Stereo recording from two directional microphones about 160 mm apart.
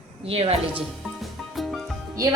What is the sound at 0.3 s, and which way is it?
Speech, 35° right (ahead or behind).